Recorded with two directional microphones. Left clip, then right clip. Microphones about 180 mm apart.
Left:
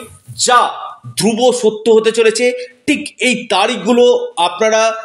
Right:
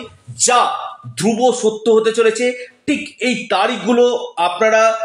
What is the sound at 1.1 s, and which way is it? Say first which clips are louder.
A man's voice: left 3 dB; 35° left (ahead or behind).